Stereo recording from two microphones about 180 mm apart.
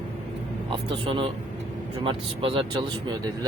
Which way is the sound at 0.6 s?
30° right (ahead or behind).